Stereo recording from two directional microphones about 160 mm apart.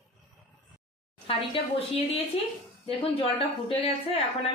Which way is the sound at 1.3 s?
35° left (ahead or behind).